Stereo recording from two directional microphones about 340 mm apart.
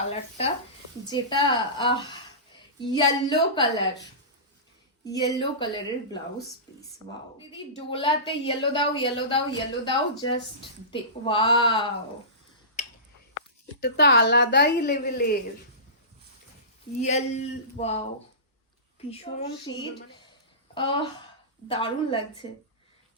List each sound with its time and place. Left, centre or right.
0.1 s a woman's voice: centre
5.4 s a woman's voice: centre
7.9 s a woman's voice: centre
13.8 s a woman's voice: left
17.0 s a woman's voice: centre
19.1 s a woman's voice: centre